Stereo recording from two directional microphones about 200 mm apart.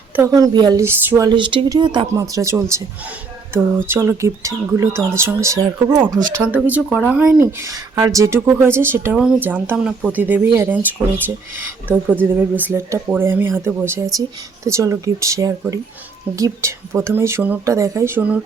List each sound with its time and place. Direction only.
0.2 s speech: 20° right (ahead or behind)